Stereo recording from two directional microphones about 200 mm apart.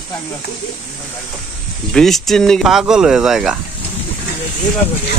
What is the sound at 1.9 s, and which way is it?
Speech, centre (ahead or behind).